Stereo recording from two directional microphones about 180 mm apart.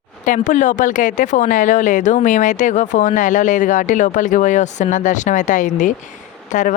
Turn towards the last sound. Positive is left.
turn(degrees=45)  # may be behind; listen again after turning